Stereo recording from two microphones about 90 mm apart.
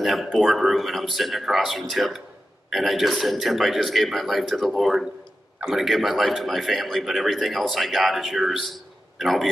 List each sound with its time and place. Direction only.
0.0 s speech: centre (ahead or behind)